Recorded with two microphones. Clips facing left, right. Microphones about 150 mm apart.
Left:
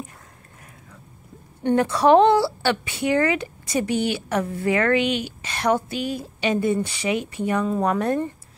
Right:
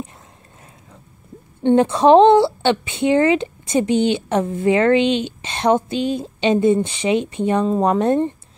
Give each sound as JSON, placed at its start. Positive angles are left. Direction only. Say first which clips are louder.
{"t": 1.6, "sound": "a woman's voice", "louder": "right 5 dB", "side_deg": -25}